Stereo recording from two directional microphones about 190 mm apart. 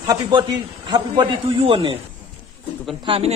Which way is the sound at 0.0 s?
20° right (ahead or behind).